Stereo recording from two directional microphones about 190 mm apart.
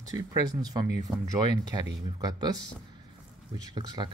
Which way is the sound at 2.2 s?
20° right (ahead or behind).